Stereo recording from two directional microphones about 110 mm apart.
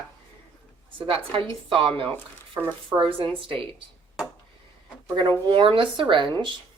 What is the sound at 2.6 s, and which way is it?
Speech, 25° right (ahead or behind).